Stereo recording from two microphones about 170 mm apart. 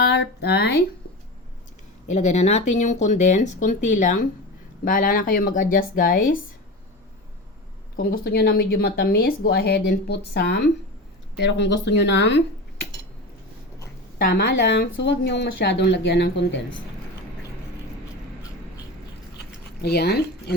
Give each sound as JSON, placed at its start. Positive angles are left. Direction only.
{"t": 0.0, "sound": "speech", "side_deg": 80}
{"t": 2.1, "sound": "speech", "side_deg": 40}
{"t": 7.9, "sound": "speech", "side_deg": 60}
{"t": 11.3, "sound": "speech", "side_deg": 90}
{"t": 14.2, "sound": "speech", "side_deg": 65}
{"t": 19.8, "sound": "speech", "side_deg": 70}